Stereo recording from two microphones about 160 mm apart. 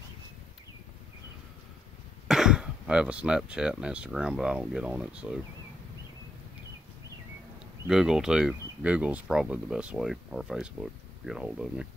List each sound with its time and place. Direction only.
2.2 s speech: 5° right (ahead or behind)
7.8 s speech: 5° right (ahead or behind)